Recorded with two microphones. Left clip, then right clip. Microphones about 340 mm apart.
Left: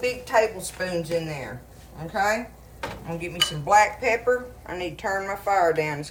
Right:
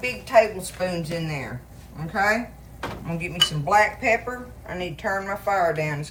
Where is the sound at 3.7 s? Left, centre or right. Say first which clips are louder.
Left 2 dB; centre.